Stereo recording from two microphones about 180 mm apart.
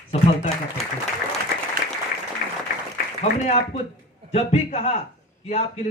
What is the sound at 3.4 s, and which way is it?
Speech, 40° left (ahead or behind).